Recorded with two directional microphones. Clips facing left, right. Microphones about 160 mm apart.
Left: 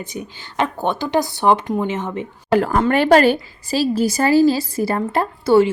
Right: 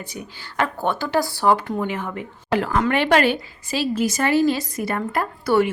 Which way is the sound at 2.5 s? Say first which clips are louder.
Left 4 dB; 40° left (ahead or behind).